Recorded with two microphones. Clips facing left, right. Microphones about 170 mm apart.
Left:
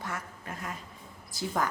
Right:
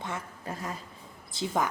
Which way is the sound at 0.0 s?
25° right (ahead or behind).